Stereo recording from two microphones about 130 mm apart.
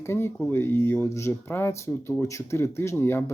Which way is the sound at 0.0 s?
20° left (ahead or behind).